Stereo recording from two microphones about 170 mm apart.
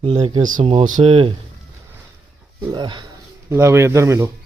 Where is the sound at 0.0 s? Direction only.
30° right (ahead or behind).